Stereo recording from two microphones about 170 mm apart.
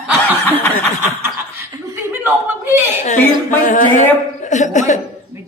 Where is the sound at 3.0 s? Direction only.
50° left (ahead or behind).